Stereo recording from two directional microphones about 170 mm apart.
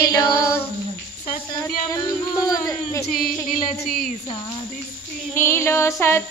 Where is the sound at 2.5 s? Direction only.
20° left (ahead or behind).